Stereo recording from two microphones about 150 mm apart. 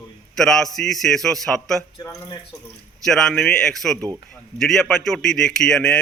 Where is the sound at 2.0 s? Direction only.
25° left (ahead or behind).